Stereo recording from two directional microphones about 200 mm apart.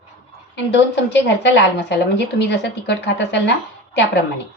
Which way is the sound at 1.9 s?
60° left (ahead or behind).